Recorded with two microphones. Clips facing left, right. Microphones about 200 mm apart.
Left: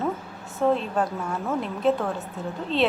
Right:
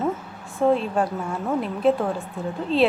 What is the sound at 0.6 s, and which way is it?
A woman's voice, 10° right (ahead or behind).